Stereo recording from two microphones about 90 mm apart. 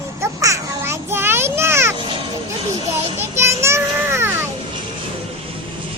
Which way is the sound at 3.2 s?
30° right (ahead or behind).